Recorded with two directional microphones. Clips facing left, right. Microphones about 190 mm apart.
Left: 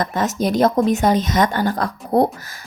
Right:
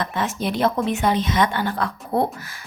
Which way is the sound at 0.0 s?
40° left (ahead or behind).